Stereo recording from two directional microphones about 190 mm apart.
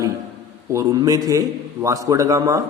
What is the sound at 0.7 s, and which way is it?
A man's voice, 15° right (ahead or behind).